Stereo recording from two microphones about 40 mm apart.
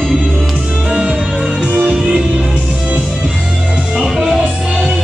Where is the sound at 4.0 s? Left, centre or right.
Centre.